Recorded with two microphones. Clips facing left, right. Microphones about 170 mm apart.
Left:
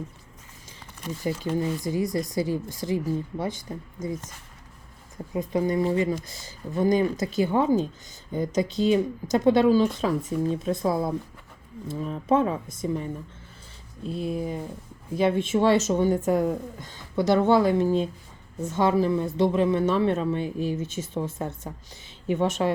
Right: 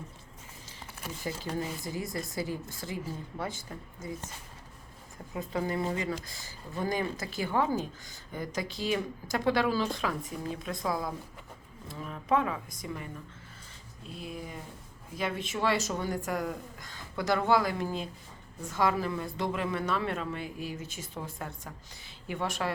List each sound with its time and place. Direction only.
1.2 s speech: 20° left (ahead or behind)
5.3 s speech: 20° left (ahead or behind)
14.2 s speech: 35° left (ahead or behind)